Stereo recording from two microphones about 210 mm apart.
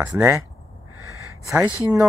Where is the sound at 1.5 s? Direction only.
5° right (ahead or behind).